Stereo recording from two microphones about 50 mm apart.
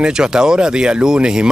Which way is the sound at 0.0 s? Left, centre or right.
Centre.